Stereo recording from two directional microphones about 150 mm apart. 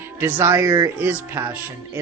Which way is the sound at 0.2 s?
15° right (ahead or behind).